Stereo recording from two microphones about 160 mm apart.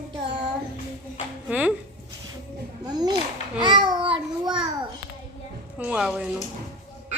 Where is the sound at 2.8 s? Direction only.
25° right (ahead or behind).